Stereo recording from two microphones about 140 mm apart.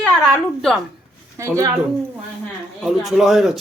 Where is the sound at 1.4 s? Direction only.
20° right (ahead or behind).